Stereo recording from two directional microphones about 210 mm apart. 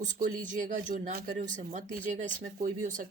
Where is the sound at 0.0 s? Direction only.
35° right (ahead or behind).